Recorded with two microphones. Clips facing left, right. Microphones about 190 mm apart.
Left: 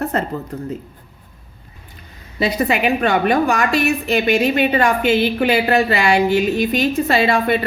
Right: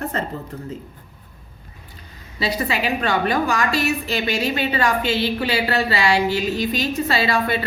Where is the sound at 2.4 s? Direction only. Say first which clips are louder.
Left 5 dB; 55° left (ahead or behind).